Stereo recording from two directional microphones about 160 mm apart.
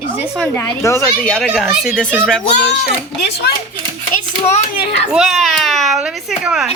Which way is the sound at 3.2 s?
85° left.